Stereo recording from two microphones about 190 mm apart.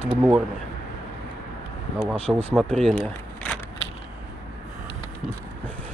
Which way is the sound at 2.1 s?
30° right (ahead or behind).